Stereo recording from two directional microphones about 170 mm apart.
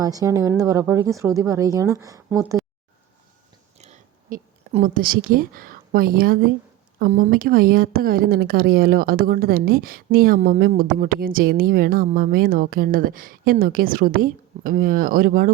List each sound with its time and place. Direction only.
0.0 s speech: 20° right (ahead or behind)
3.8 s speech: 40° right (ahead or behind)